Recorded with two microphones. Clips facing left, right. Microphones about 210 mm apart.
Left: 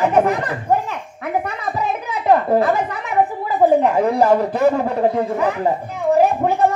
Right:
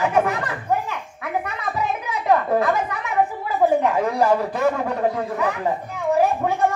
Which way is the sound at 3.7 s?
30° left (ahead or behind).